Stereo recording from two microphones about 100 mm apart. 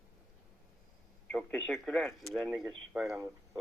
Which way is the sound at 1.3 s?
10° left (ahead or behind).